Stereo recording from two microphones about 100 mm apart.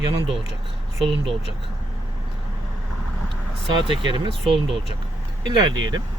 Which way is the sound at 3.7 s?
55° right (ahead or behind).